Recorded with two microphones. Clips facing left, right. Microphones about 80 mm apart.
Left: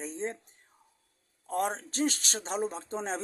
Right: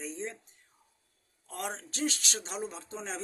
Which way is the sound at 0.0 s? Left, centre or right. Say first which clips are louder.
Left 3 dB; left.